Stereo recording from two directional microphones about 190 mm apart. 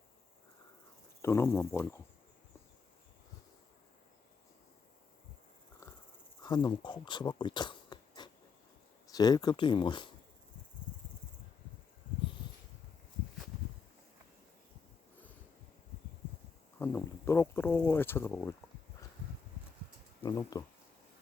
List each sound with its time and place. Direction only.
1.2 s speech: 15° left (ahead or behind)
5.8 s wheeze: 15° left (ahead or behind)
6.4 s speech: 20° left (ahead or behind)
16.7 s a sound: 10° left (ahead or behind)
20.2 s speech: 20° left (ahead or behind)